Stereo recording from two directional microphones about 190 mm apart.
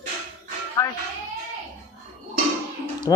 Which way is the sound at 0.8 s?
15° left (ahead or behind).